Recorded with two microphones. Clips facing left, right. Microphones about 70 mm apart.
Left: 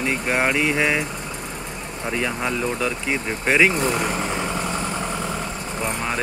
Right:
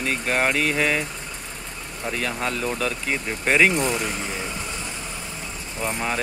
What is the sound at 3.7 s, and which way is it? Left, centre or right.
Speech, left.